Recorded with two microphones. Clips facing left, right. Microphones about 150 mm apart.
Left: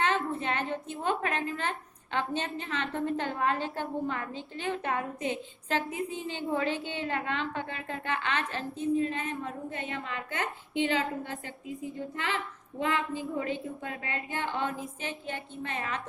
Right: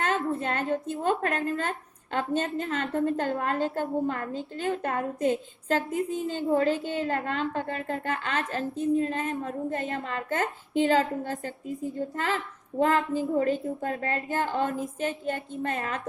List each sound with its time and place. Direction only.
0.0 s a woman's voice: 45° right (ahead or behind)